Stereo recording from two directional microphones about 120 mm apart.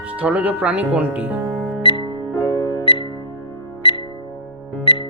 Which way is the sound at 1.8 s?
45° left (ahead or behind).